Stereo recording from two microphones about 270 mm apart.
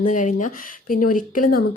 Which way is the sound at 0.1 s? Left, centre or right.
Left.